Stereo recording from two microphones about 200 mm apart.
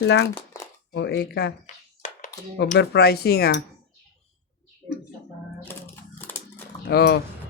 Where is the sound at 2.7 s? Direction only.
55° left (ahead or behind).